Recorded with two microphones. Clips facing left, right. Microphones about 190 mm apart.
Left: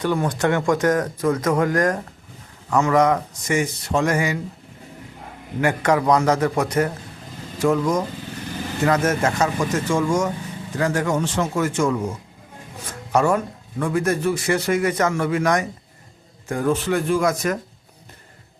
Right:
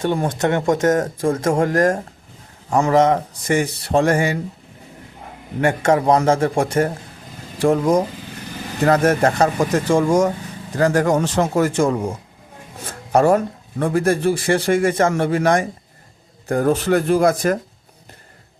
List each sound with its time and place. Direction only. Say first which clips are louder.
0.0 s speech: right 1 dB; 25° right (ahead or behind)
5.5 s speech: right 3 dB; 25° right (ahead or behind)